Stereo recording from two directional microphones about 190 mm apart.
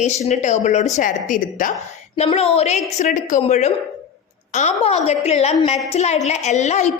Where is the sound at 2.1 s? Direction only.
35° left (ahead or behind).